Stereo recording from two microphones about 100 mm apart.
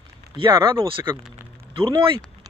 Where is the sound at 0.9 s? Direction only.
60° right (ahead or behind).